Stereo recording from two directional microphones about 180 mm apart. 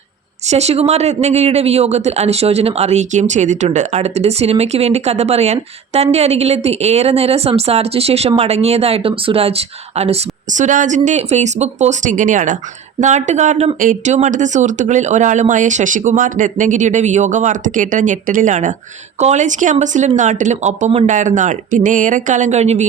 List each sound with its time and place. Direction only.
0.4 s a man's voice: 35° right (ahead or behind)